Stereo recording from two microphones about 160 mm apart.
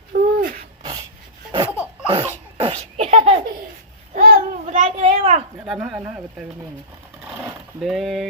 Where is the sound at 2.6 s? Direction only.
40° right (ahead or behind).